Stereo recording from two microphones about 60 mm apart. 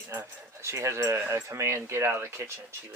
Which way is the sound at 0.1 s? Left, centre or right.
Right.